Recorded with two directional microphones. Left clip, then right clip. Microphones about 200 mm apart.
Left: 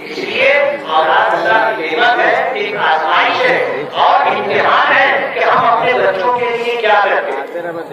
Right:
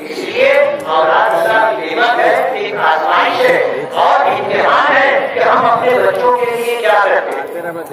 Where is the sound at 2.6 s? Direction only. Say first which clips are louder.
Even; 55° right (ahead or behind).